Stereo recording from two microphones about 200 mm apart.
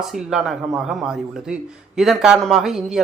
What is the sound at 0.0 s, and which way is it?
Speech, centre (ahead or behind).